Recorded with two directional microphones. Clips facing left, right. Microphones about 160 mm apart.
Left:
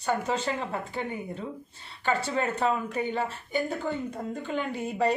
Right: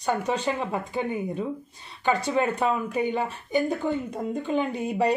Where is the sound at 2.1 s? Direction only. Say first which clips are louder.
Right 4 dB; 15° right (ahead or behind).